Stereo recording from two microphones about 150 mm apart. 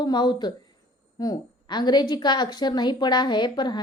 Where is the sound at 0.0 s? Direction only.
30° left (ahead or behind).